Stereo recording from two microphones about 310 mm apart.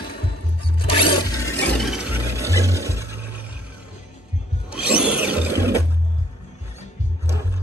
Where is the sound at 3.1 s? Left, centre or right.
Right.